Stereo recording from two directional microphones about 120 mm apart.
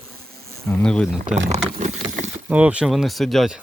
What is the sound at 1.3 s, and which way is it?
Speech, 70° right (ahead or behind).